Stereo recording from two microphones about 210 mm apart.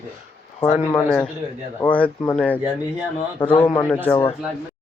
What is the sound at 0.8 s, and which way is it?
Speech, 10° left (ahead or behind).